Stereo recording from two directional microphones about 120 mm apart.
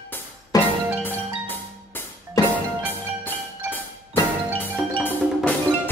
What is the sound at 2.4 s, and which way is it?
Music, 30° left (ahead or behind).